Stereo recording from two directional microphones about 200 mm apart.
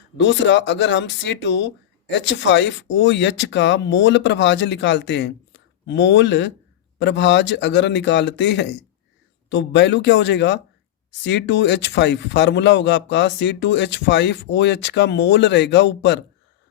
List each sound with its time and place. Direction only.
0.2 s speech: 65° left (ahead or behind)